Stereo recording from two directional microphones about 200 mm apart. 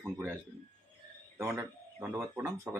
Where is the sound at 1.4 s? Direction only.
15° right (ahead or behind).